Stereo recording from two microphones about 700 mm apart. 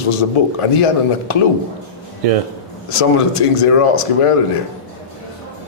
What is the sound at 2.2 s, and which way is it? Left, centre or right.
Speech, right.